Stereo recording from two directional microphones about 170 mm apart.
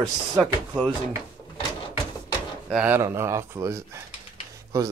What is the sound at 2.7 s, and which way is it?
Speech, 10° right (ahead or behind).